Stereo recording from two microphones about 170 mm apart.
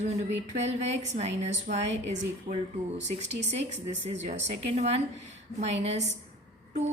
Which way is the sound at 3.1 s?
45° right (ahead or behind).